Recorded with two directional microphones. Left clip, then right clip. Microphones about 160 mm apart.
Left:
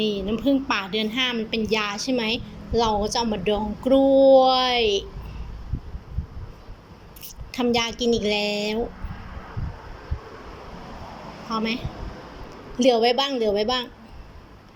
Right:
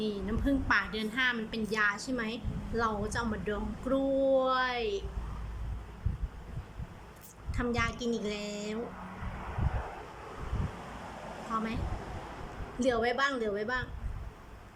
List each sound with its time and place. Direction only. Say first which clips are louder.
0.0 s a woman's voice: left 10 dB; 10° left (ahead or behind)
7.5 s a woman's voice: left 10 dB; 15° left (ahead or behind)
11.5 s a woman's voice: left 8 dB; 15° left (ahead or behind)
12.8 s a woman's voice: left 10 dB; 15° left (ahead or behind)